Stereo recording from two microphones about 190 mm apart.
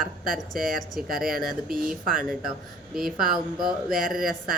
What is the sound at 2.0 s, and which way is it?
Speech, 50° right (ahead or behind).